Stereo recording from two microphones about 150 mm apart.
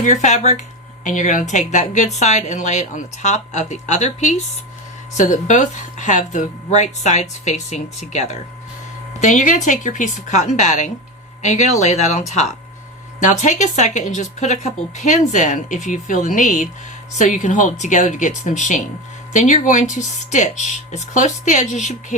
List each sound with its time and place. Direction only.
0.0 s speech: 50° left (ahead or behind)
13.2 s speech: 55° left (ahead or behind)